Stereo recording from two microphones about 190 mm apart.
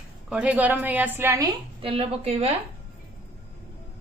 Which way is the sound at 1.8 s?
30° right (ahead or behind).